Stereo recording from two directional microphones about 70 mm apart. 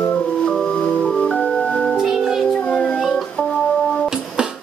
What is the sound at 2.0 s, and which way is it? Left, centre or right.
Music, centre.